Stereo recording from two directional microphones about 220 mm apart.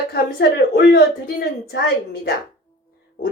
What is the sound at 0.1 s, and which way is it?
Speech, 45° left (ahead or behind).